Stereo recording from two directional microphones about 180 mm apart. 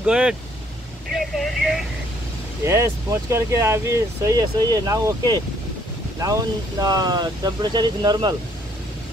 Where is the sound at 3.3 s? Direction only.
15° right (ahead or behind).